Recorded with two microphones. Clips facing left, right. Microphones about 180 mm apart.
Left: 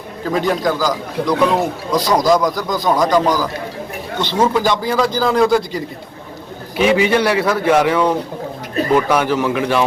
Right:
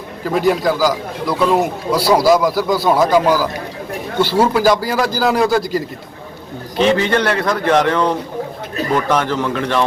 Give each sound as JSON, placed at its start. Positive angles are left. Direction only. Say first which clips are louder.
{"t": 0.3, "sound": "a man's voice", "louder": "right 2 dB", "side_deg": -5}
{"t": 6.7, "sound": "a man's voice", "louder": "left 1 dB", "side_deg": 10}